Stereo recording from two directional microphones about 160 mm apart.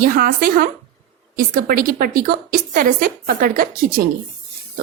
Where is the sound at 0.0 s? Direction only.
75° right (ahead or behind).